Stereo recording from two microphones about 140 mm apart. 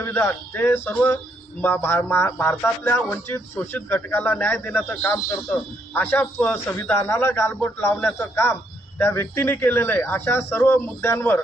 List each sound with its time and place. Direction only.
0.0 s music: 15° left (ahead or behind)